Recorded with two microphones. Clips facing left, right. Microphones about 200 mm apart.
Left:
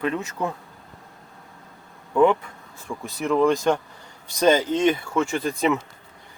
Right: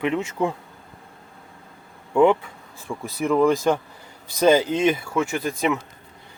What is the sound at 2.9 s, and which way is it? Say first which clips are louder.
Speech: right 2 dB; centre (ahead or behind).